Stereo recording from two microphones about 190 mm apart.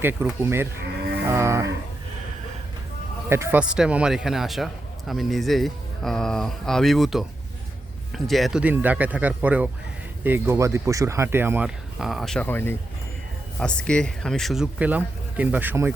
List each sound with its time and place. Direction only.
0.0 s speech: 10° right (ahead or behind)
3.2 s a man's voice: 15° right (ahead or behind)